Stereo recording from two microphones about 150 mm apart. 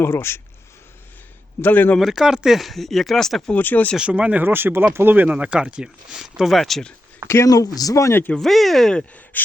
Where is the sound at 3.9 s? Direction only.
5° right (ahead or behind).